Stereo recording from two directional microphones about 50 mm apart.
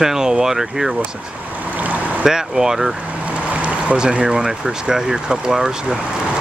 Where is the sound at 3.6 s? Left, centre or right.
Right.